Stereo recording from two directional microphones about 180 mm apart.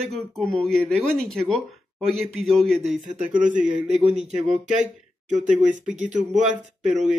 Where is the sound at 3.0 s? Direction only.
45° right (ahead or behind).